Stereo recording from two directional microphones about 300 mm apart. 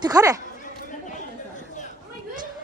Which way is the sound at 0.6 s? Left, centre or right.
Left.